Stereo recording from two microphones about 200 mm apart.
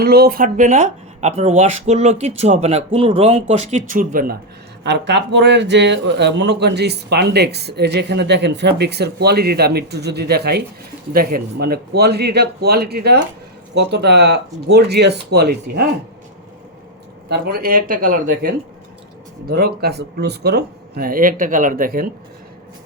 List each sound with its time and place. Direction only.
0.0 s speech: 50° right (ahead or behind)
4.8 s speech: 60° right (ahead or behind)
17.2 s speech: 55° right (ahead or behind)